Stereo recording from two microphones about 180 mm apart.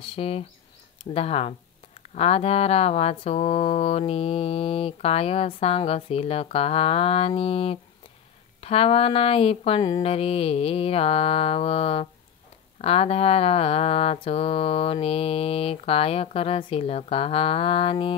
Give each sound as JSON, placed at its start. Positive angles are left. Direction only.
{"t": 0.0, "sound": "speech", "side_deg": 30}